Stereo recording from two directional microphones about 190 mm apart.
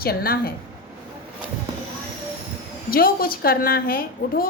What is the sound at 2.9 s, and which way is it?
A woman's voice, 50° left (ahead or behind).